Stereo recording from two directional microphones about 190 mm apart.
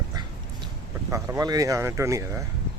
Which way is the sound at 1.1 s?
15° right (ahead or behind).